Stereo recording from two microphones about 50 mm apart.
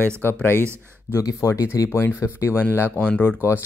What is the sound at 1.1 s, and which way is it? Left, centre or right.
Speech, left.